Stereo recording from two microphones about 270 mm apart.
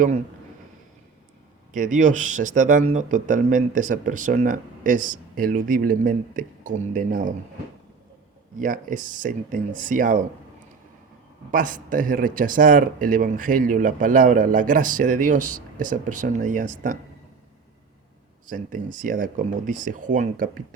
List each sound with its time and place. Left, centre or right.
1.7 s speech: right
8.5 s speech: right
11.5 s speech: right
18.4 s speech: right